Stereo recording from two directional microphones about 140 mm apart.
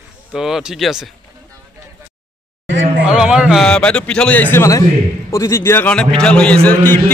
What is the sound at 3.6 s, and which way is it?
A man's voice, 5° left (ahead or behind).